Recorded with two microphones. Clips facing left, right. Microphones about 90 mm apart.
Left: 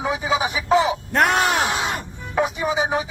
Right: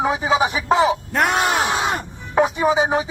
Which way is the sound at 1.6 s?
40° right (ahead or behind).